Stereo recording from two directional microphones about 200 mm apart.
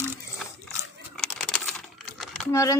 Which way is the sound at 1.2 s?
5° left (ahead or behind).